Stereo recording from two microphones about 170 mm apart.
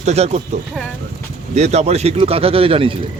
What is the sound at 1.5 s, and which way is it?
Speech, 40° right (ahead or behind).